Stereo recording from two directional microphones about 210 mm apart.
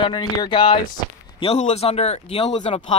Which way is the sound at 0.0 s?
20° left (ahead or behind).